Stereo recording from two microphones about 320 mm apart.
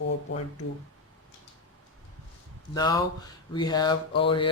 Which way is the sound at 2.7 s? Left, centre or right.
Centre.